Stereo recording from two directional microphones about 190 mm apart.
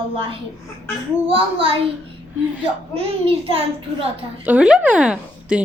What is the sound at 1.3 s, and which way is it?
Speech, 30° right (ahead or behind).